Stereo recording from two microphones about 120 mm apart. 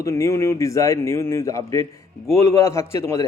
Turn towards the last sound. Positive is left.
turn(degrees=25)  # may be behind; listen again after turning